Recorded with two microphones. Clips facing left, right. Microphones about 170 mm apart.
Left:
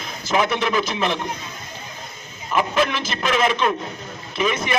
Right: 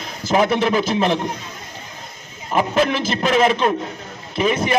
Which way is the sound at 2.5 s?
35° right (ahead or behind).